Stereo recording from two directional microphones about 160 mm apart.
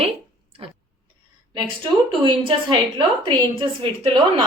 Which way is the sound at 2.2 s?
30° right (ahead or behind).